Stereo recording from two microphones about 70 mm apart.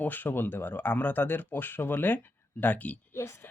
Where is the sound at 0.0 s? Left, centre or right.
Left.